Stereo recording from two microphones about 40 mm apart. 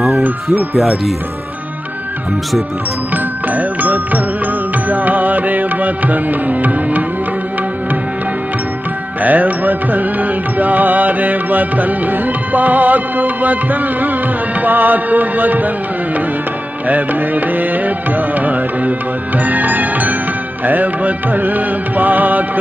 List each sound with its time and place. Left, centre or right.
3.4 s speech: right
4.8 s music: right
9.2 s music: right
16.8 s music: right